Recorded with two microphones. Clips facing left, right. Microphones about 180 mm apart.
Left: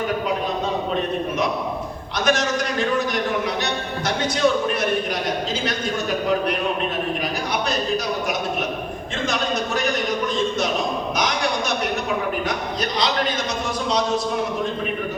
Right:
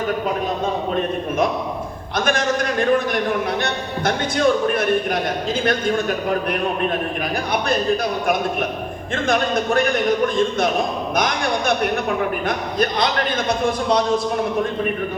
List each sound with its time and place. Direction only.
2.1 s a man's voice: 50° right (ahead or behind)
9.2 s a man's voice: 55° right (ahead or behind)
10.6 s a sound: 55° right (ahead or behind)
12.5 s a man's voice: 55° right (ahead or behind)